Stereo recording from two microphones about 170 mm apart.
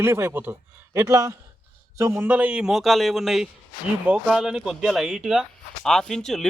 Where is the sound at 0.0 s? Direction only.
15° right (ahead or behind).